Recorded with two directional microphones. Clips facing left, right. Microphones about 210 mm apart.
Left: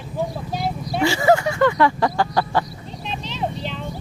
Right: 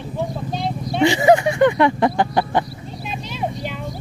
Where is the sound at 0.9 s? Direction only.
20° right (ahead or behind).